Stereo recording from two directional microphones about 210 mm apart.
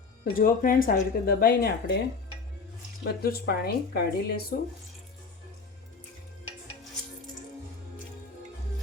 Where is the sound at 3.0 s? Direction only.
50° left (ahead or behind).